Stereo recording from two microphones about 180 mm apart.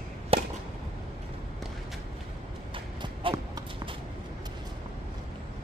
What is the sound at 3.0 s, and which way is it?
Clip-clop, 25° right (ahead or behind).